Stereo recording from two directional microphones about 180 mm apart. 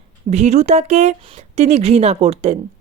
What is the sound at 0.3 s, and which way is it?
A woman's voice, 40° right (ahead or behind).